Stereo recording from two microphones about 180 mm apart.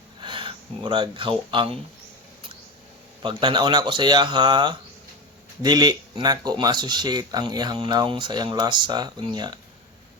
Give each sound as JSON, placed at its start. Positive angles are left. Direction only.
{"t": 0.2, "sound": "speech", "side_deg": -30}
{"t": 3.2, "sound": "speech", "side_deg": -25}